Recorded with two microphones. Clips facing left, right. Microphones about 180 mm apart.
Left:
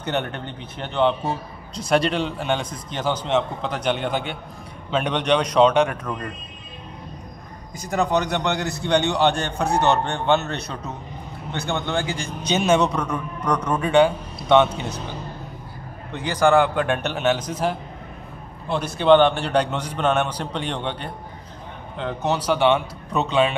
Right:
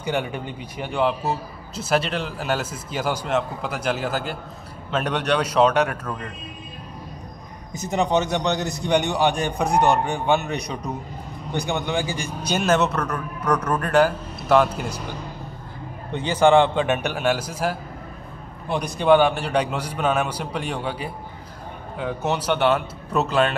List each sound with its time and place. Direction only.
0.0 s a man's voice: 10° right (ahead or behind)
7.7 s a man's voice: 20° right (ahead or behind)
16.5 s a man's voice: 25° right (ahead or behind)
16.9 s a man's voice: 10° right (ahead or behind)